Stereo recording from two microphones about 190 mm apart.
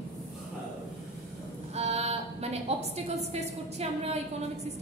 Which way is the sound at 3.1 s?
35° right (ahead or behind).